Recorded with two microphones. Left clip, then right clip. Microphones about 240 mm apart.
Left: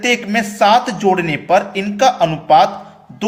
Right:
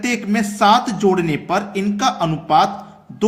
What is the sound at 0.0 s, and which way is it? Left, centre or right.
A man's voice, centre.